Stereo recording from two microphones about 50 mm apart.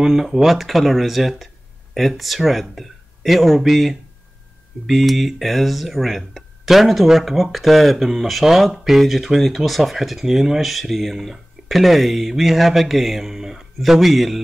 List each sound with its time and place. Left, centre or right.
0.0 s speech: centre